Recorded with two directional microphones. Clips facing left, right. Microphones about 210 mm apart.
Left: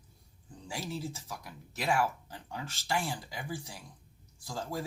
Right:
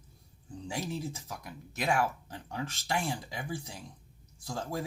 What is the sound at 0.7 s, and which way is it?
Speech, 20° right (ahead or behind).